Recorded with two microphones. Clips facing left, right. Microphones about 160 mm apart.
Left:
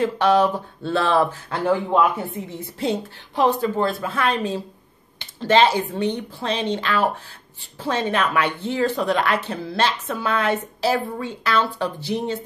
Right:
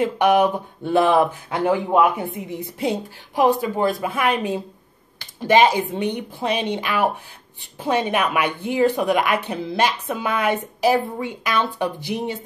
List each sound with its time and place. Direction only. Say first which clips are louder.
0.0 s speech: right 1 dB; 15° right (ahead or behind)